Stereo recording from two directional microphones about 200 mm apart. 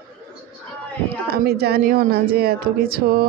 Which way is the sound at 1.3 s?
50° right (ahead or behind).